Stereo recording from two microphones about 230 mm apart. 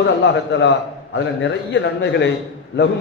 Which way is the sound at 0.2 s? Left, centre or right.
Left.